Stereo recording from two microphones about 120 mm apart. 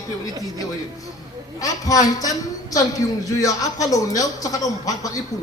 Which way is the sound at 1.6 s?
30° left (ahead or behind).